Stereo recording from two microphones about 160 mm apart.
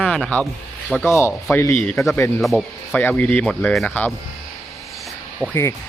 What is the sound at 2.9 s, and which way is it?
Speech, 10° left (ahead or behind).